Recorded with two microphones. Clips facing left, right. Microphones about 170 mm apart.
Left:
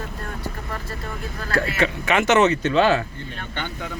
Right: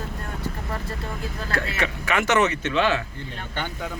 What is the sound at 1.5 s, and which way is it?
Speech, 25° left (ahead or behind).